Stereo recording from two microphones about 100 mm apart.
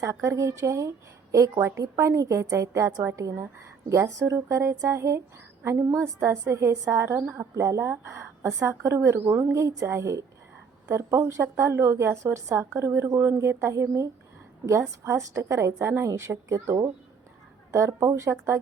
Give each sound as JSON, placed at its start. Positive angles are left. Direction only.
{"t": 0.0, "sound": "a woman's voice", "side_deg": -35}